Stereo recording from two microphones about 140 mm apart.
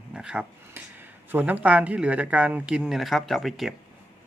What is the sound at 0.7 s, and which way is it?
Speech, 15° right (ahead or behind).